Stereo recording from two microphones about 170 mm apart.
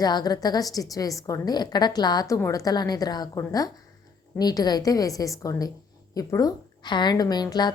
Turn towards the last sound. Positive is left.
turn(degrees=25)  # may be behind; listen again after turning